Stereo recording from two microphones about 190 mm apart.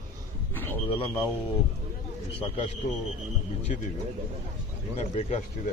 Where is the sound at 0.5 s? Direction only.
10° left (ahead or behind).